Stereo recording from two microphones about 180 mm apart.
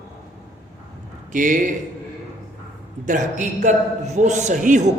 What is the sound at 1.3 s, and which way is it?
Speech, 45° right (ahead or behind).